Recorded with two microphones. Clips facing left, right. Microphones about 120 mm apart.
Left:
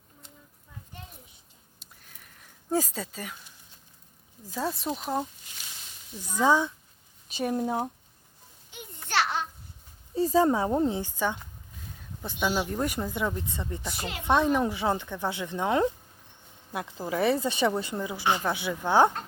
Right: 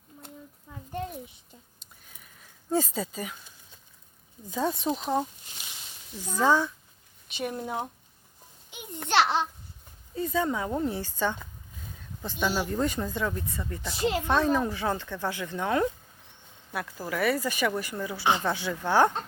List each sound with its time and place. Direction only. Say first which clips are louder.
1.8 s a sound: even; centre (ahead or behind)
2.6 s speech: right 1 dB; 5° left (ahead or behind)
4.4 s speech: right 3 dB; centre (ahead or behind)
6.4 s speech: even; 15° left (ahead or behind)
7.3 s speech: left 4 dB; 35° left (ahead or behind)
9.0 s a sound: right 4 dB; 25° right (ahead or behind)
10.2 s speech: left 5 dB; 35° left (ahead or behind)
10.8 s speech: left 1 dB; 15° left (ahead or behind)